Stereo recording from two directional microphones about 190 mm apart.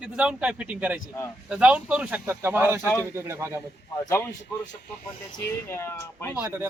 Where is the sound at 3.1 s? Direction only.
15° right (ahead or behind).